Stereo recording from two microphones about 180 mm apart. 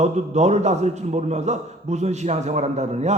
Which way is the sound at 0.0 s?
40° right (ahead or behind).